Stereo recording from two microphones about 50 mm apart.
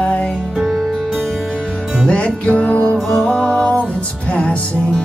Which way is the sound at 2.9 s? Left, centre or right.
Centre.